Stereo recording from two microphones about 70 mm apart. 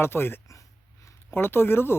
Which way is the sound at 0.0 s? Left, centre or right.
Left.